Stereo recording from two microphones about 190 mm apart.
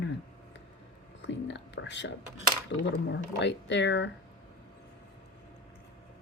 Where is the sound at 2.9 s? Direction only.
70° left (ahead or behind).